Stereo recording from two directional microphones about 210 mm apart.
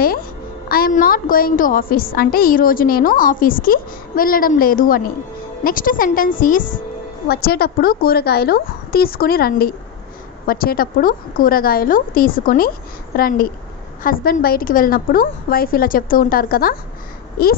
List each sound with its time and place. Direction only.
0.0 s a woman's voice: 45° left (ahead or behind)